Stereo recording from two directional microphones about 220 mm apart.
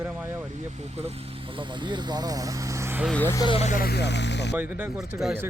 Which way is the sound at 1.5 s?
20° right (ahead or behind).